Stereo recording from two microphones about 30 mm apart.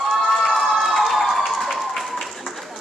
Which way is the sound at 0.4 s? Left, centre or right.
Centre.